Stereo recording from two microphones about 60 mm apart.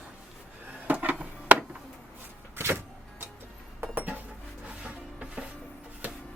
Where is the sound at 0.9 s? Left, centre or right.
Right.